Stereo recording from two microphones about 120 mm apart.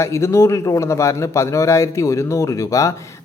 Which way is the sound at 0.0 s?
25° left (ahead or behind).